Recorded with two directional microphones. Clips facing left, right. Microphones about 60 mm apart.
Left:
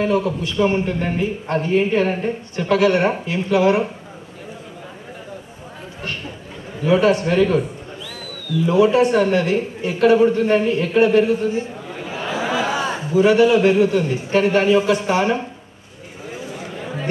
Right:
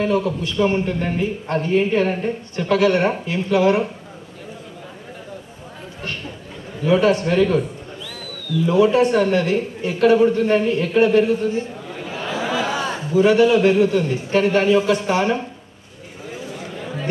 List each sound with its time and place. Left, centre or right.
0.0 s a man's voice: left
6.8 s a man's voice: left
16.3 s a sound: centre